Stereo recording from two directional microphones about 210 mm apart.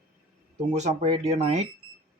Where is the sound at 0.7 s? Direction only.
35° right (ahead or behind).